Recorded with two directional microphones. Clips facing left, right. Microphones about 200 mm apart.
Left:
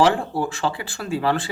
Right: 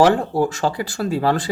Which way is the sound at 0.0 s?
40° right (ahead or behind).